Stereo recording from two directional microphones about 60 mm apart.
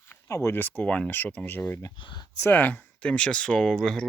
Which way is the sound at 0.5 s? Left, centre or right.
Left.